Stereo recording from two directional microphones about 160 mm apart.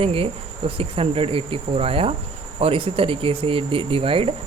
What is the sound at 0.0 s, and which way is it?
Speech, 35° right (ahead or behind).